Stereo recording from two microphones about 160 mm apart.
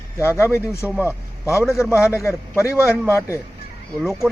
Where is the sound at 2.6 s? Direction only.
5° right (ahead or behind).